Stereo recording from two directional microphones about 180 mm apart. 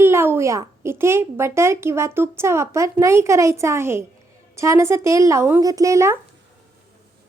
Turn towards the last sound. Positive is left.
turn(degrees=-15)  # may be behind; listen again after turning